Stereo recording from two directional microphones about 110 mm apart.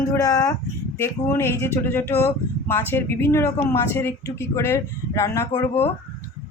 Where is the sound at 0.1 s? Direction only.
30° left (ahead or behind).